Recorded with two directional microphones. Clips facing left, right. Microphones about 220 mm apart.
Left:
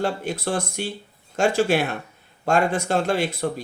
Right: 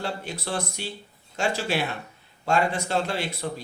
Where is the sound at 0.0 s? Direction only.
50° left (ahead or behind).